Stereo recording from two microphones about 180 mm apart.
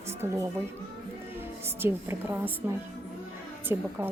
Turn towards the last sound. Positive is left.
turn(degrees=-15)  # may be behind; listen again after turning